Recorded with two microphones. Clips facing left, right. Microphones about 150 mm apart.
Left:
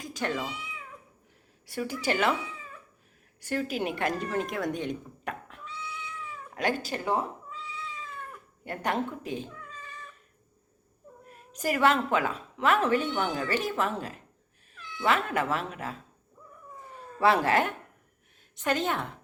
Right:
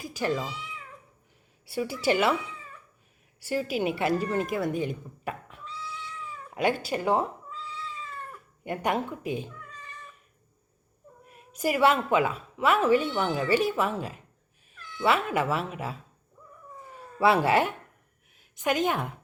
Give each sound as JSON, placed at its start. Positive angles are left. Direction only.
{"t": 0.0, "sound": "cat", "side_deg": -5}
{"t": 1.6, "sound": "a woman's voice", "side_deg": -10}
{"t": 3.4, "sound": "speech", "side_deg": -10}
{"t": 6.5, "sound": "cat", "side_deg": -10}
{"t": 6.9, "sound": "speech", "side_deg": -20}
{"t": 8.6, "sound": "a woman's voice", "side_deg": -10}
{"t": 11.5, "sound": "a woman's voice", "side_deg": -10}
{"t": 17.2, "sound": "a woman's voice", "side_deg": -10}